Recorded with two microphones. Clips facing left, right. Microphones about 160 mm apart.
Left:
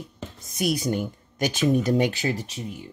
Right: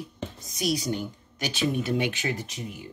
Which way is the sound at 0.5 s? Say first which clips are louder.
Left 3 dB; 55° left (ahead or behind).